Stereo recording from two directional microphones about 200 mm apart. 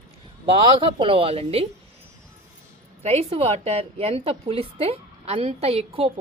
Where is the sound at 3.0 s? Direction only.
30° right (ahead or behind).